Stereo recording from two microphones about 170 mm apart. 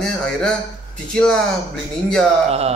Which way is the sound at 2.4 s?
40° right (ahead or behind).